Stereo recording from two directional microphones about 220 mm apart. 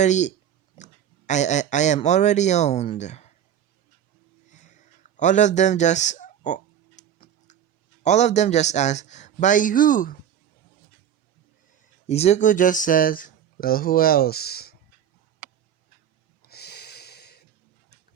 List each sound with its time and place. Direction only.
0.0 s speech: 30° left (ahead or behind)
4.5 s a sound: 35° left (ahead or behind)
7.0 s tick-tock: 30° left (ahead or behind)
8.0 s speech: 30° left (ahead or behind)
11.8 s speech: 30° left (ahead or behind); by 14.8 s 45° left (ahead or behind)
16.4 s snort: 45° left (ahead or behind)